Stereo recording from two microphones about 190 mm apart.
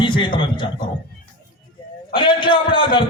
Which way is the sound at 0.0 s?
25° left (ahead or behind).